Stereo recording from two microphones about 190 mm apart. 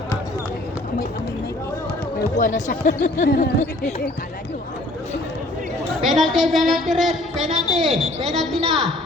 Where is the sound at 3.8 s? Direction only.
35° left (ahead or behind).